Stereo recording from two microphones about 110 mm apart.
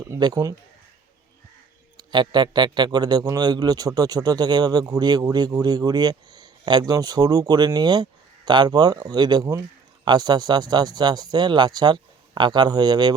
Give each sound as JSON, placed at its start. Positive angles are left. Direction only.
{"t": 0.2, "sound": "speech", "side_deg": -35}
{"t": 2.0, "sound": "speech", "side_deg": -40}